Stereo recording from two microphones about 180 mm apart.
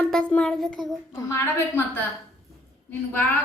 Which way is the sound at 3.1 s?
10° left (ahead or behind).